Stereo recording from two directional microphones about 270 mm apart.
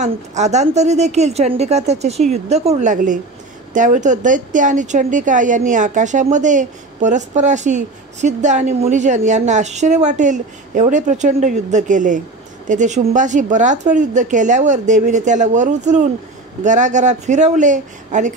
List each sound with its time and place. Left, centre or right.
0.0 s a woman's voice: right